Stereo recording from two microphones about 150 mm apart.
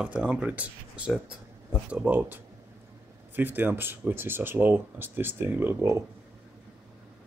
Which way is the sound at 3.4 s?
15° right (ahead or behind).